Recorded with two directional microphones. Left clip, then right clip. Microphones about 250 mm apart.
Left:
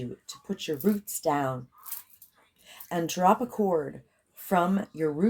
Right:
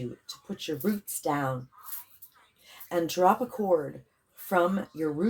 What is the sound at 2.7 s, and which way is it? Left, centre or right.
Speech, left.